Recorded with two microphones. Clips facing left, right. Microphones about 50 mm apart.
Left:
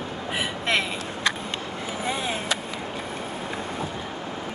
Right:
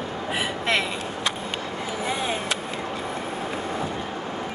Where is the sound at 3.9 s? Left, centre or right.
Centre.